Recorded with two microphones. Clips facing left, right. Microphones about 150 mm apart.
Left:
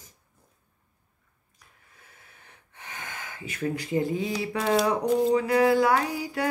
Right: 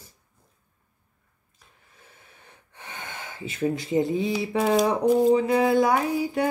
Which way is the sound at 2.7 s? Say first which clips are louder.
Right 2 dB; 30° right (ahead or behind).